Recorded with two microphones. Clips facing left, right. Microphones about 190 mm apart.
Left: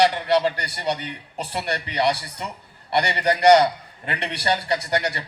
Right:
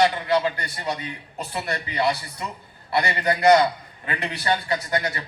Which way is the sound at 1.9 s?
35° left (ahead or behind).